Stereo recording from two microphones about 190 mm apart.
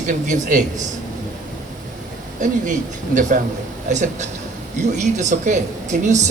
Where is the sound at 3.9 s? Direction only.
40° right (ahead or behind).